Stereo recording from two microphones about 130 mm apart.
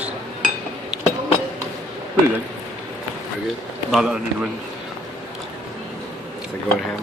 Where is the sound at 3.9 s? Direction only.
5° right (ahead or behind).